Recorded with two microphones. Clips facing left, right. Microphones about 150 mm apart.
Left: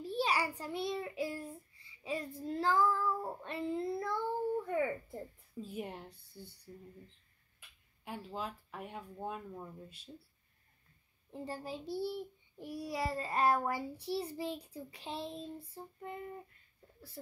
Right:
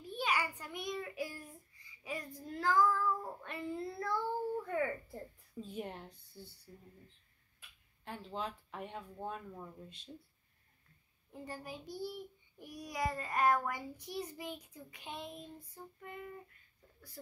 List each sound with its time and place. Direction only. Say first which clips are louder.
0.0 s child singing: left 3 dB; 35° left (ahead or behind)
4.6 s a sound: left 2 dB; 20° left (ahead or behind)
5.6 s a woman's voice: left 1 dB; 5° left (ahead or behind)
8.0 s speech: even; 5° left (ahead or behind)
11.3 s a child's voice: left 4 dB; 30° left (ahead or behind)